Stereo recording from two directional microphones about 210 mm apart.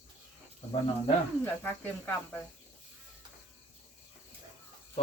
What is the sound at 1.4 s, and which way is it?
Speech, 10° left (ahead or behind).